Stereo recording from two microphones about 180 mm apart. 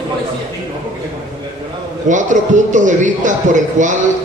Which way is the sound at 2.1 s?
45° right (ahead or behind).